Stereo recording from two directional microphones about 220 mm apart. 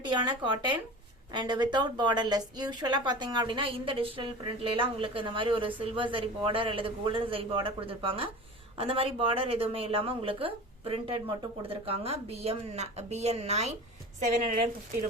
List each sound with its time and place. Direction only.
0.1 s a woman's voice: 20° right (ahead or behind); by 14.7 s 35° right (ahead or behind)